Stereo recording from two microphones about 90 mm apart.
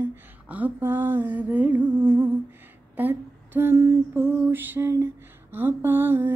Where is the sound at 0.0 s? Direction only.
20° right (ahead or behind).